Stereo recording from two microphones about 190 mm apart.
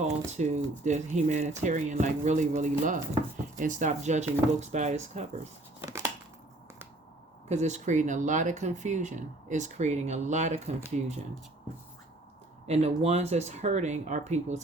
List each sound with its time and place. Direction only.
0.3 s speech: 35° right (ahead or behind)
5.8 s a sound: 15° right (ahead or behind)
7.4 s speech: 35° right (ahead or behind)
12.6 s speech: 35° right (ahead or behind)